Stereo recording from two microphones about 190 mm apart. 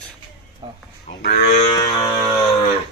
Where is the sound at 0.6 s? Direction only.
25° right (ahead or behind).